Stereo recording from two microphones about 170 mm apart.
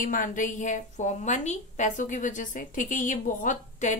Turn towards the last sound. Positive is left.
turn(degrees=50)  # may be behind; listen again after turning